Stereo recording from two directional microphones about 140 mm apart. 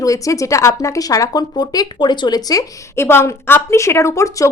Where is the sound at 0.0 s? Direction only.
25° left (ahead or behind).